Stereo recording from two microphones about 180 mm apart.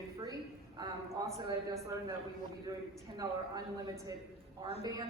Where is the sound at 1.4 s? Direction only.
15° right (ahead or behind).